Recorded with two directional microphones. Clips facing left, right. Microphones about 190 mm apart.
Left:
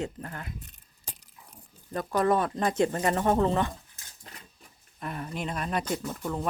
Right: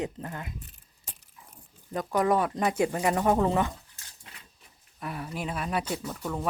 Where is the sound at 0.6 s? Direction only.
35° left (ahead or behind).